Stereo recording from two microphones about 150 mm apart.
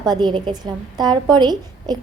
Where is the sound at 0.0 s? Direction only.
30° right (ahead or behind).